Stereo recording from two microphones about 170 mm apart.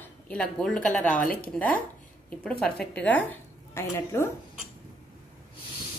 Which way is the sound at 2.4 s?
5° left (ahead or behind).